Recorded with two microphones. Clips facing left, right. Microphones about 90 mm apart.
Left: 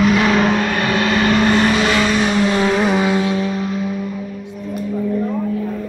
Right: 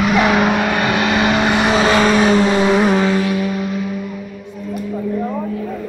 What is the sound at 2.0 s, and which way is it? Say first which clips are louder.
Vehicle: right 4 dB; 45° right (ahead or behind).